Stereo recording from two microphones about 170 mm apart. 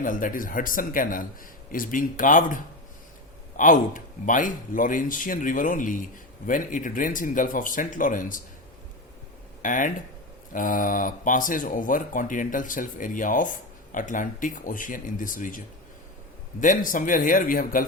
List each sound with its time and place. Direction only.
0.0 s speech: 55° left (ahead or behind)
3.6 s speech: 50° left (ahead or behind)
9.6 s speech: 50° left (ahead or behind)